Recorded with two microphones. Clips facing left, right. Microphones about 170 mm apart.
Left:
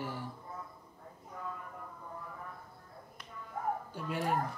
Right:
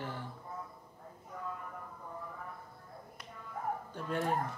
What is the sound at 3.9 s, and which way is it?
Speech, 5° left (ahead or behind).